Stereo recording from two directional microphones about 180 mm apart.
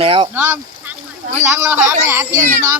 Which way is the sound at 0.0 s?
30° right (ahead or behind).